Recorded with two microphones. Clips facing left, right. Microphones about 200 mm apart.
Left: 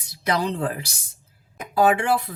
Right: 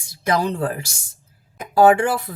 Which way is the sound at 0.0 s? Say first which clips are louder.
Right 3 dB; 45° right (ahead or behind).